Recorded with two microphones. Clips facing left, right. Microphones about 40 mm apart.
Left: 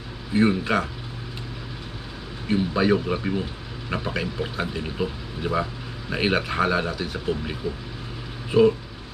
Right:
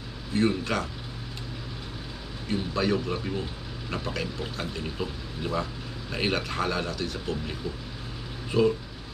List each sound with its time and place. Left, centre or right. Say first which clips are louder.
0.3 s speech: left 5 dB; centre
2.4 s speech: left 6 dB; centre